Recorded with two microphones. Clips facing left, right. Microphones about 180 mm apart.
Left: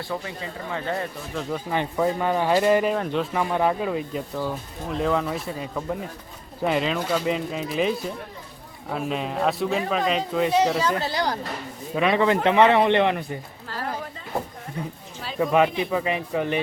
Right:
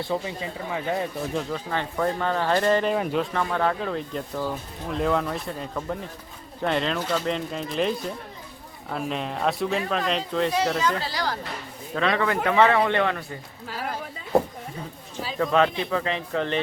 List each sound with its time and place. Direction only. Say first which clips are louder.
0.1 s speech: right 3 dB; 15° right (ahead or behind)
1.5 s speech: left 2 dB; 10° left (ahead or behind)
2.9 s a man's voice: even; 5° right (ahead or behind)
3.3 s a man's voice: left 2 dB; 15° left (ahead or behind)
15.4 s speech: left 2 dB; 15° left (ahead or behind)